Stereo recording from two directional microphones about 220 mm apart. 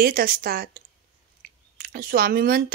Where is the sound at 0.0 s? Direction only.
40° right (ahead or behind).